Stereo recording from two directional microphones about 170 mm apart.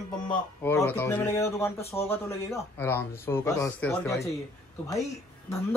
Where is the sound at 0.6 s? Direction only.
15° left (ahead or behind).